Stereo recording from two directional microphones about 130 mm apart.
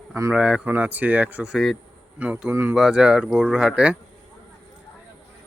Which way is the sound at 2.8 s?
5° right (ahead or behind).